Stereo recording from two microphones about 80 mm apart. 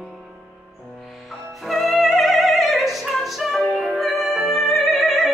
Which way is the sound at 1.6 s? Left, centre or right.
Centre.